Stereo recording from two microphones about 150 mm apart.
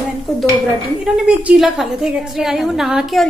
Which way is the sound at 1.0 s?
5° right (ahead or behind).